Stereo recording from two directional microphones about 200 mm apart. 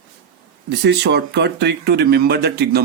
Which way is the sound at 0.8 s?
55° right (ahead or behind).